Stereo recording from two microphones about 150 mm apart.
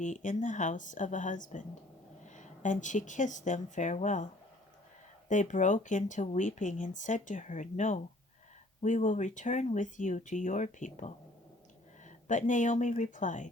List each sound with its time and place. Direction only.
0.0 s speech: 55° left (ahead or behind)
5.3 s speech: 55° left (ahead or behind)